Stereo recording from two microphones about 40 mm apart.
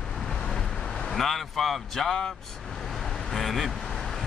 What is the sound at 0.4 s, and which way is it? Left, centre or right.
Vehicle, centre.